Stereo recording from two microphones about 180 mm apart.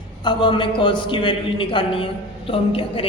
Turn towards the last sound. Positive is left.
turn(degrees=30)  # may be behind; listen again after turning